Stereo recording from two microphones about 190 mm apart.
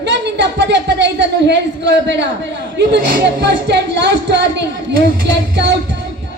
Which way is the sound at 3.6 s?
65° right (ahead or behind).